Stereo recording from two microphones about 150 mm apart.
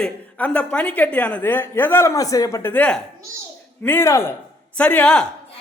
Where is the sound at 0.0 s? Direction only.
10° left (ahead or behind).